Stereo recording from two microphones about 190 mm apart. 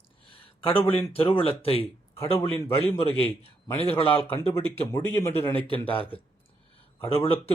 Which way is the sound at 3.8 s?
30° left (ahead or behind).